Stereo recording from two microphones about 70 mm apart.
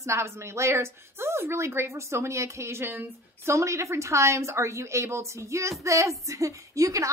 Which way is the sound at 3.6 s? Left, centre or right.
Right.